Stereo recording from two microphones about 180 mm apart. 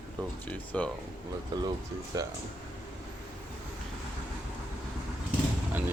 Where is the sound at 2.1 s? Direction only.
20° right (ahead or behind).